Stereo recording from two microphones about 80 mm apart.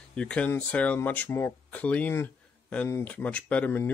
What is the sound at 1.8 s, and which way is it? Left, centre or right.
Speech, centre.